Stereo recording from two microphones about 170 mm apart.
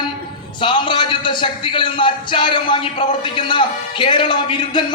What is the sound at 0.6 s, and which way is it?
A man's voice, 30° left (ahead or behind).